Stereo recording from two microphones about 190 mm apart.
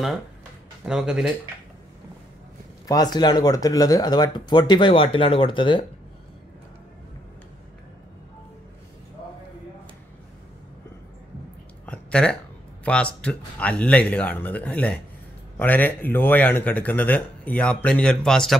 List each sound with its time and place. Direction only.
0.8 s speech: 5° right (ahead or behind)
2.9 s speech: 20° left (ahead or behind)
11.8 s a sound: 5° left (ahead or behind)
12.8 s speech: 5° left (ahead or behind)